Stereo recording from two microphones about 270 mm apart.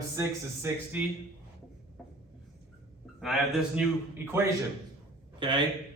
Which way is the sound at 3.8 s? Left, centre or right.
Centre.